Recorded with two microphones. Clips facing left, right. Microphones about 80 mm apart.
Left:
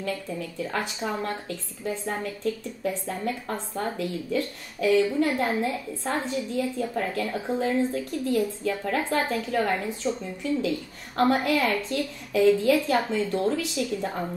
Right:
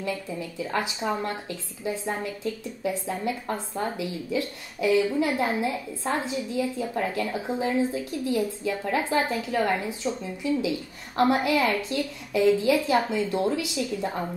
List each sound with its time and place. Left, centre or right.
0.0 s a woman's voice: centre